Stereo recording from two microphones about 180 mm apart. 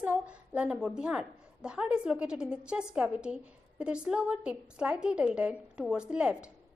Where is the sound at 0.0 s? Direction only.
5° right (ahead or behind).